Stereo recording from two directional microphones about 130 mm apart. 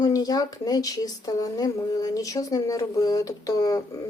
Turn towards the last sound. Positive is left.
turn(degrees=30)  # may be behind; listen again after turning